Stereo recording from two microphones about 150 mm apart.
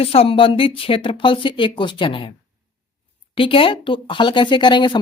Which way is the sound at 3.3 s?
35° left (ahead or behind).